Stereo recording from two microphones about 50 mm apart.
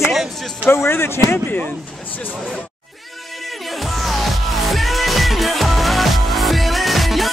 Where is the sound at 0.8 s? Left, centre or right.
Left.